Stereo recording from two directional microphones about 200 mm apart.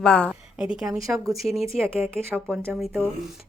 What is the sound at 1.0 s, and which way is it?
Speech, 15° right (ahead or behind).